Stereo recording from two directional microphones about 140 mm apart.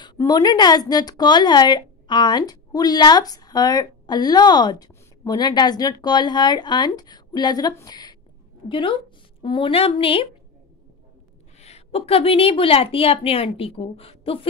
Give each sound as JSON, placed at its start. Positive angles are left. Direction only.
{"t": 0.2, "sound": "speech", "side_deg": 30}
{"t": 11.6, "sound": "a woman's voice", "side_deg": 45}